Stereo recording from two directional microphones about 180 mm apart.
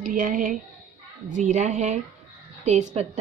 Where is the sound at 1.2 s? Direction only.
45° right (ahead or behind).